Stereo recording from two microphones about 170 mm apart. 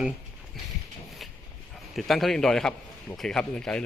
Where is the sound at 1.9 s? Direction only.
Centre (ahead or behind).